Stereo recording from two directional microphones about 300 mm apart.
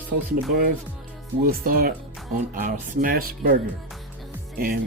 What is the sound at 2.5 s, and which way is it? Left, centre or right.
Speech, right.